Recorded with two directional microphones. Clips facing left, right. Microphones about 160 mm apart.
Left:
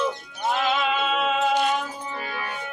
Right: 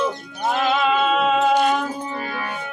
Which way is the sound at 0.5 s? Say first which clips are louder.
Right 5 dB; 45° right (ahead or behind).